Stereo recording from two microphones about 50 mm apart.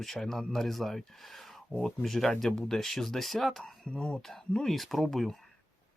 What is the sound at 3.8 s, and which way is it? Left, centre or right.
Speech, centre.